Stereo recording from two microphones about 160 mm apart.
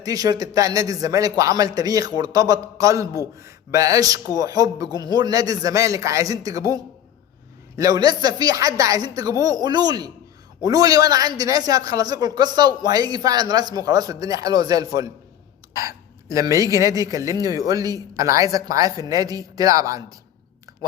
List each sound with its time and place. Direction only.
0.0 s a man's voice: 20° right (ahead or behind)
7.8 s a man's voice: 25° right (ahead or behind)